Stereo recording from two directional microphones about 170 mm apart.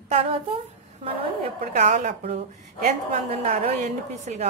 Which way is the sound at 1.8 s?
50° right (ahead or behind).